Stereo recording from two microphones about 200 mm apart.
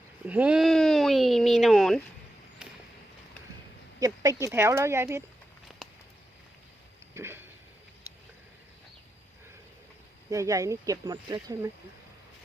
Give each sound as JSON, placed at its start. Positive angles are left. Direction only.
{"t": 0.3, "sound": "speech", "side_deg": -5}
{"t": 4.0, "sound": "speech", "side_deg": -15}
{"t": 7.1, "sound": "a sound", "side_deg": -10}
{"t": 10.2, "sound": "speech", "side_deg": -15}